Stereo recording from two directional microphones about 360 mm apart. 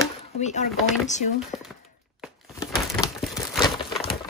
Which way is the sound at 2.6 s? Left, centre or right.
Centre.